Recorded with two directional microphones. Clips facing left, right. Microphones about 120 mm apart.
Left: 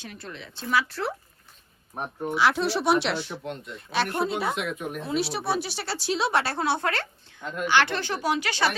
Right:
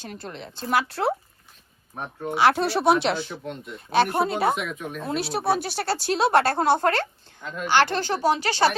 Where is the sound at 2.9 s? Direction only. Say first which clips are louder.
Right 4 dB; centre (ahead or behind).